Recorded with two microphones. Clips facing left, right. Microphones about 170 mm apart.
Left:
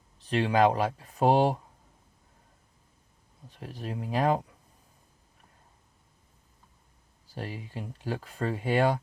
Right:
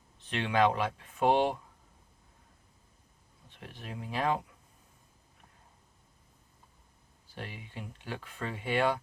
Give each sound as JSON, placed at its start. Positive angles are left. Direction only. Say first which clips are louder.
{"t": 0.2, "sound": "speech", "louder": "left 4 dB", "side_deg": 35}
{"t": 3.5, "sound": "speech", "louder": "left 7 dB", "side_deg": 40}
{"t": 7.3, "sound": "speech", "louder": "left 5 dB", "side_deg": 40}